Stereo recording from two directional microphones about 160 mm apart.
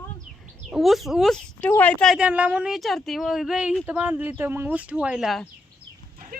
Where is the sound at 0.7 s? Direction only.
Centre (ahead or behind).